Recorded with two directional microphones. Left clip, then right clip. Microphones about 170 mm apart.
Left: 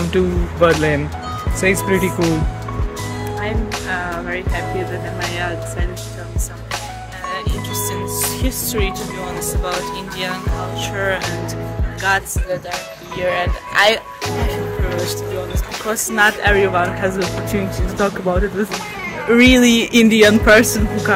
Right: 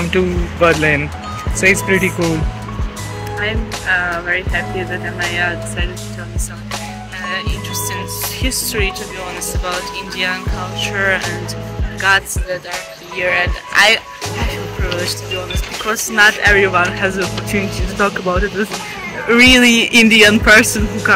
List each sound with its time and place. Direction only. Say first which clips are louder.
0.0 s speech: right 2 dB; 5° right (ahead or behind)
3.8 s speech: right 10 dB; 20° left (ahead or behind)
7.7 s music: left 1 dB; centre (ahead or behind)
8.5 s a man's voice: right 7 dB; 20° left (ahead or behind)
10.1 s a man's voice: right 7 dB; 20° left (ahead or behind)
13.2 s speech: right 3 dB; 30° left (ahead or behind)
15.8 s a man's voice: right 3 dB; 15° left (ahead or behind)